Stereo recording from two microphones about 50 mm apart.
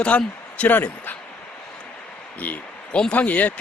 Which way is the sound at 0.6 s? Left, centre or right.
Left.